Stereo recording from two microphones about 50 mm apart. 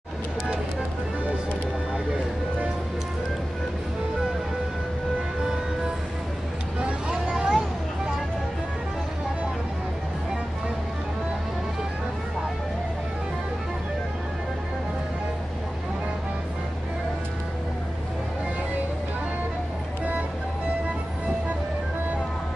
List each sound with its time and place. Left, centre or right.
6.8 s vehicle: centre